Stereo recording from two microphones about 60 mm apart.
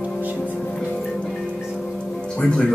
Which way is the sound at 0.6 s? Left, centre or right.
Centre.